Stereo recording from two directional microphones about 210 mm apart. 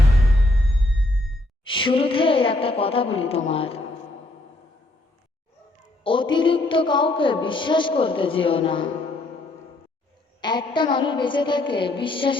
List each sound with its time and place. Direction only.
1.7 s a woman's voice: 25° left (ahead or behind)
6.0 s a sound: 25° left (ahead or behind)
6.3 s music: 25° left (ahead or behind)
10.4 s music: 20° left (ahead or behind)